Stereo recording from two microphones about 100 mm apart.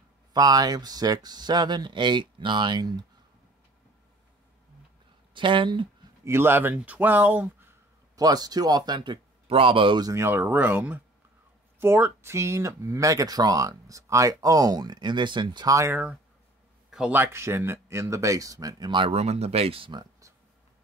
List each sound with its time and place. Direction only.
0.3 s speech: 40° right (ahead or behind)
5.3 s speech: 55° right (ahead or behind)
6.2 s speech: 25° right (ahead or behind)
8.2 s speech: 40° right (ahead or behind)
9.5 s speech: 65° right (ahead or behind)
9.9 s speech: 40° right (ahead or behind)
10.2 s speech: 20° right (ahead or behind); by 15.6 s 50° right (ahead or behind)
15.6 s speech: 35° right (ahead or behind)
15.9 s speech: 10° right (ahead or behind)
17.1 s speech: 25° right (ahead or behind); by 19.0 s 45° right (ahead or behind)
19.0 s speech: 90° right; by 19.9 s 75° right (ahead or behind)